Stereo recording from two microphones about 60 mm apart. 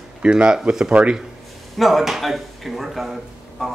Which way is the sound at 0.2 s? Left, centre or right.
Centre.